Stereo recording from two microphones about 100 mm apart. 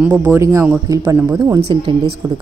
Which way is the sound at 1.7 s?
50° right (ahead or behind).